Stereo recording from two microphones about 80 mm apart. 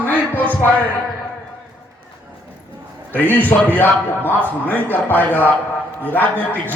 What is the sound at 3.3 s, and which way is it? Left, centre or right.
A man's voice, left.